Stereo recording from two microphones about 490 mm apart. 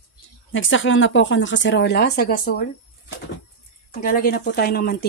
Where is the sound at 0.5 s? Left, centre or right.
Left.